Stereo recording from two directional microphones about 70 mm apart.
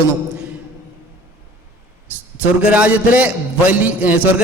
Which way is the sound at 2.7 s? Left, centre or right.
Right.